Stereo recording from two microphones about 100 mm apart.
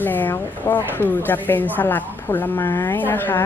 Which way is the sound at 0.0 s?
20° left (ahead or behind).